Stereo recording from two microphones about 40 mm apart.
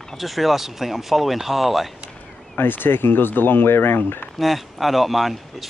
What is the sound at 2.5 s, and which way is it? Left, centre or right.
Speech, left.